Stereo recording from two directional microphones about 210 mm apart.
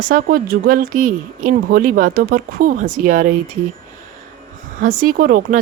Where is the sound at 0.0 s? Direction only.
45° right (ahead or behind).